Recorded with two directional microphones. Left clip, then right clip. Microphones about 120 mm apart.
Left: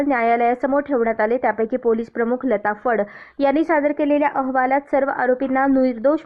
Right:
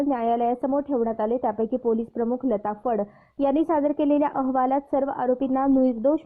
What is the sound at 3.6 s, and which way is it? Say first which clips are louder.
A woman's voice: left 4 dB; 20° right (ahead or behind).